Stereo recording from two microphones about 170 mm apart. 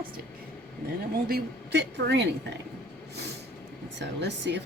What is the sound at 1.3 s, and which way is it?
Speech, 80° right.